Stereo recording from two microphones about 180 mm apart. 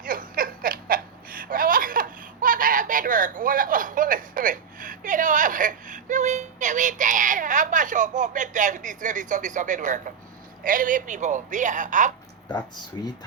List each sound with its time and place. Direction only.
0.0 s a sound: 50° right (ahead or behind)
10.6 s speech: 50° right (ahead or behind)
12.9 s speech: 20° left (ahead or behind)